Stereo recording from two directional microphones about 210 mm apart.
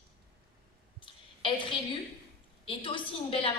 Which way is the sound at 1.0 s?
25° left (ahead or behind).